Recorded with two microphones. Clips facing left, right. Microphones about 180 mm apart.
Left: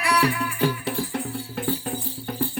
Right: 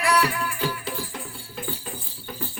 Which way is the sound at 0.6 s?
60° left (ahead or behind).